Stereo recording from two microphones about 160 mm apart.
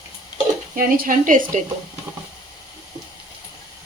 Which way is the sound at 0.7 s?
60° right (ahead or behind).